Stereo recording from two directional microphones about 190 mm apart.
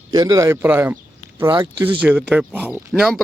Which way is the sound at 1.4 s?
25° right (ahead or behind).